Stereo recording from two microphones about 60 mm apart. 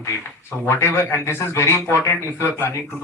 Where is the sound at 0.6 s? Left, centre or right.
Left.